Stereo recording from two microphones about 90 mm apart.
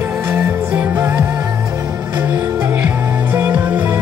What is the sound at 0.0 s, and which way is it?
Music, 15° right (ahead or behind).